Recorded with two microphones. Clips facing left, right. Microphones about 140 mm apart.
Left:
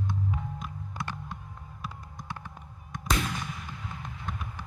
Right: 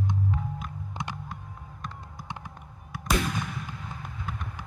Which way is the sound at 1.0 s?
20° right (ahead or behind).